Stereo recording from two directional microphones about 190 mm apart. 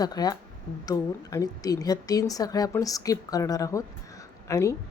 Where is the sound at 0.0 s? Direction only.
20° left (ahead or behind).